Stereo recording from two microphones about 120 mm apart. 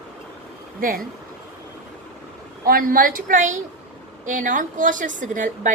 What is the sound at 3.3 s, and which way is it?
A woman's voice, 90° right.